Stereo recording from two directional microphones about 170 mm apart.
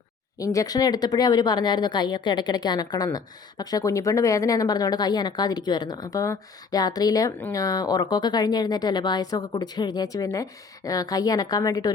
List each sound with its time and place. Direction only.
0.3 s speech: 20° left (ahead or behind)